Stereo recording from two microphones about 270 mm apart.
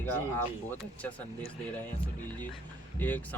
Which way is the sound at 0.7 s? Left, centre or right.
Centre.